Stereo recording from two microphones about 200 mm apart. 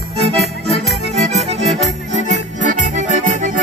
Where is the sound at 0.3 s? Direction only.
30° right (ahead or behind).